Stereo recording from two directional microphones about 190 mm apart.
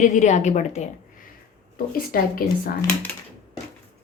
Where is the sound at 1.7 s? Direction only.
50° left (ahead or behind).